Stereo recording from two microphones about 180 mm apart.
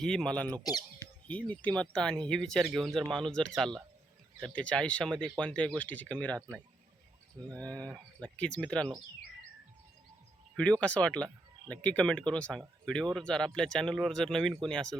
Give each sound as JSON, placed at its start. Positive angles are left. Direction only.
{"t": 0.0, "sound": "speech", "side_deg": 5}
{"t": 0.6, "sound": "speech", "side_deg": 20}
{"t": 1.3, "sound": "speech", "side_deg": 5}
{"t": 7.5, "sound": "speech", "side_deg": 5}
{"t": 10.6, "sound": "speech", "side_deg": 5}